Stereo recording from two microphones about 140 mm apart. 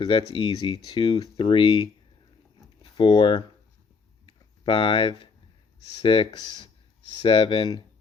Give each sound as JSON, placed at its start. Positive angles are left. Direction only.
{"t": 0.0, "sound": "speech", "side_deg": 40}
{"t": 3.0, "sound": "speech", "side_deg": 35}
{"t": 4.3, "sound": "a sound", "side_deg": 40}
{"t": 5.8, "sound": "speech", "side_deg": 40}